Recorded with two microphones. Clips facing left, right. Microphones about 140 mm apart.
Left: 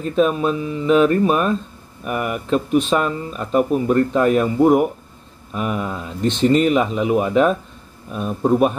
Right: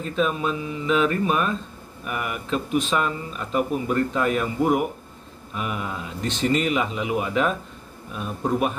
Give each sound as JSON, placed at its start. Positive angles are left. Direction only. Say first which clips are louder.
{"t": 0.1, "sound": "speech", "louder": "left 7 dB", "side_deg": 40}